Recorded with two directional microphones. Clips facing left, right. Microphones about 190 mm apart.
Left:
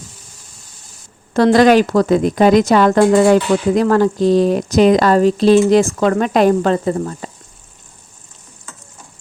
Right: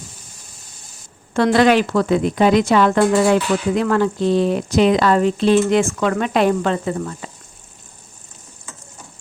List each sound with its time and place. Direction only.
1.3 s speech: 40° left (ahead or behind)